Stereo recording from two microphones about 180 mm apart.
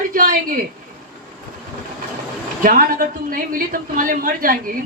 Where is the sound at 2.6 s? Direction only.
50° right (ahead or behind).